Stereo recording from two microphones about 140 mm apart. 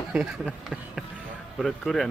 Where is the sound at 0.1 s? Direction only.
5° right (ahead or behind).